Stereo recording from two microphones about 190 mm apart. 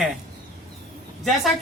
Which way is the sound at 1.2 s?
Centre (ahead or behind).